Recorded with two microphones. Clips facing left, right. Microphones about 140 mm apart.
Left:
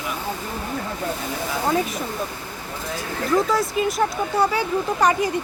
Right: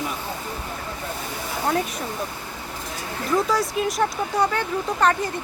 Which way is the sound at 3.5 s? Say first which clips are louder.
Left 2 dB; centre (ahead or behind).